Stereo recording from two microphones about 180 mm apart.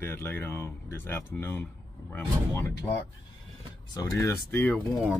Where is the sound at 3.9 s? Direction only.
20° left (ahead or behind).